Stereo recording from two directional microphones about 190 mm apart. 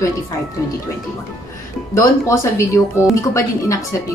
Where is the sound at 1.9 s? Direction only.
15° left (ahead or behind).